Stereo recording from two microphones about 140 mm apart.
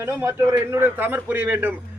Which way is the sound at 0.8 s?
15° right (ahead or behind).